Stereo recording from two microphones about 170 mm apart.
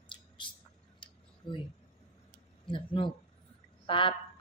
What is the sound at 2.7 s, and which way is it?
Speech, 30° left (ahead or behind).